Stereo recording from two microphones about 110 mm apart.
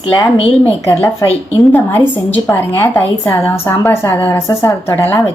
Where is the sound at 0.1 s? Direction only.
50° left (ahead or behind).